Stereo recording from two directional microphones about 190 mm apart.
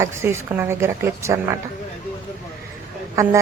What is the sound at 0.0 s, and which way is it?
A woman's voice, 15° right (ahead or behind).